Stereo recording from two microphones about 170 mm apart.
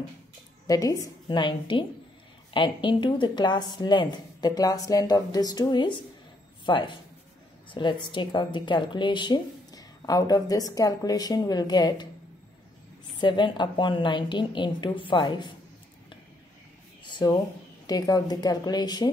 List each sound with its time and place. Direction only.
0.7 s a woman's voice: 20° left (ahead or behind)
13.2 s a woman's voice: 25° left (ahead or behind)
17.0 s a sound: 25° left (ahead or behind)
17.8 s a woman's voice: 25° left (ahead or behind)